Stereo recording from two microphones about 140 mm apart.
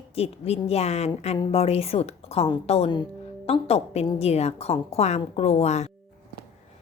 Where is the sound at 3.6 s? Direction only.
50° left (ahead or behind).